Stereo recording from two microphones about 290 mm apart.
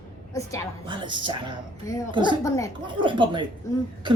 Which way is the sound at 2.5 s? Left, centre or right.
Centre.